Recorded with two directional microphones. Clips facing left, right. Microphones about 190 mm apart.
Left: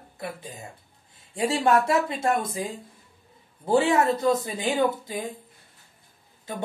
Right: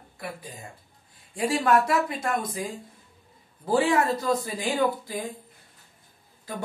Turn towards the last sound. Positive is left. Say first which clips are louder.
# left 1 dB
turn(degrees=20)  # may be behind; listen again after turning